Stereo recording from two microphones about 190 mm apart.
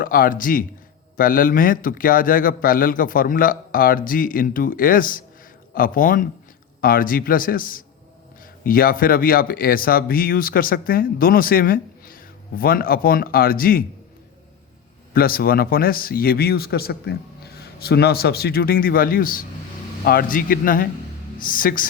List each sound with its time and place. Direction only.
0.0 s speech: 50° left (ahead or behind)
15.1 s speech: 50° left (ahead or behind)